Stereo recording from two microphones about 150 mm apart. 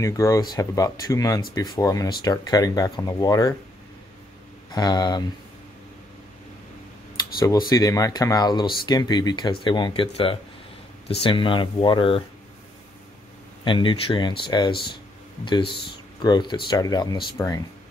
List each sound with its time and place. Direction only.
0.0 s speech: 20° left (ahead or behind)
4.7 s speech: 25° left (ahead or behind)
7.3 s speech: 25° left (ahead or behind)
13.7 s speech: 35° left (ahead or behind)
17.4 s speech: 15° left (ahead or behind)